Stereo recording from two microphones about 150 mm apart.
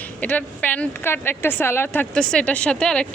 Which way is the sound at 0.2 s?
10° left (ahead or behind).